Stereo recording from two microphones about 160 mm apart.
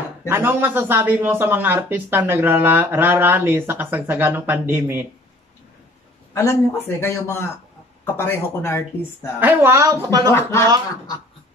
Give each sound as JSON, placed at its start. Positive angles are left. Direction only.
{"t": 0.3, "sound": "speech", "side_deg": -15}
{"t": 6.3, "sound": "speech", "side_deg": 15}
{"t": 9.4, "sound": "speech", "side_deg": -15}